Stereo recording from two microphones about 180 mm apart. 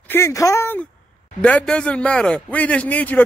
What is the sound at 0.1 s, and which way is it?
A man's voice, 15° left (ahead or behind).